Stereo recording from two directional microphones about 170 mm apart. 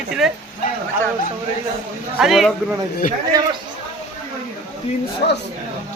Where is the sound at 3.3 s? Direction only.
20° right (ahead or behind).